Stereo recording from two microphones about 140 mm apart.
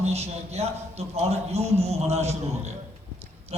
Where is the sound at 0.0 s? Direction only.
50° right (ahead or behind).